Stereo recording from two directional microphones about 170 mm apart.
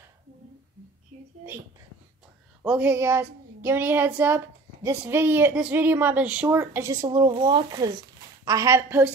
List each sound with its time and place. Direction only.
2.6 s speech: 10° right (ahead or behind)